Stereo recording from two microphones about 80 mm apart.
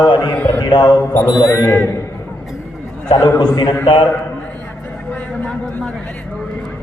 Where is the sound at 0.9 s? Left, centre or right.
Left.